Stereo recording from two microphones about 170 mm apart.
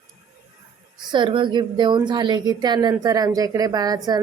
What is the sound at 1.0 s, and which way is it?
A woman's voice, 30° right (ahead or behind).